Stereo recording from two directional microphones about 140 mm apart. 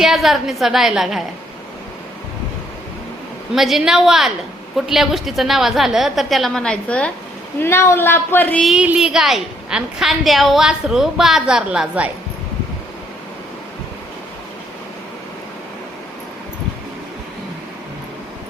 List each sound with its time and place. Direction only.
0.0 s a woman's voice: centre (ahead or behind)
3.5 s a woman's voice: centre (ahead or behind)
8.6 s a woman's voice: 5° right (ahead or behind)